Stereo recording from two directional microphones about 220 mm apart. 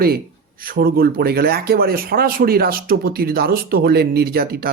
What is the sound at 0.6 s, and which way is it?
Speech, 40° right (ahead or behind).